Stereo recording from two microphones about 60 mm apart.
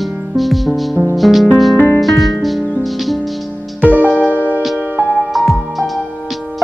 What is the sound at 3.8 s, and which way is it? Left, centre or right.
Music, right.